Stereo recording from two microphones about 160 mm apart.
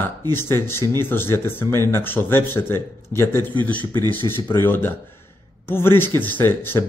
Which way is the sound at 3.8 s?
25° right (ahead or behind).